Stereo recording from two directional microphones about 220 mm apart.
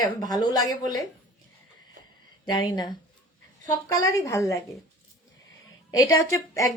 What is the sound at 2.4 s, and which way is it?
Speech, 20° left (ahead or behind).